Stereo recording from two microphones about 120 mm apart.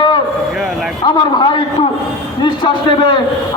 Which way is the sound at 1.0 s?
40° left (ahead or behind).